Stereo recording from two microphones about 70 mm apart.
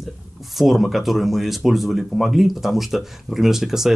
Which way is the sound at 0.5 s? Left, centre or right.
Centre.